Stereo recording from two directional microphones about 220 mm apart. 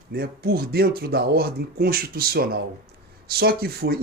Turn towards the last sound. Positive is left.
turn(degrees=-45)  # may be behind; listen again after turning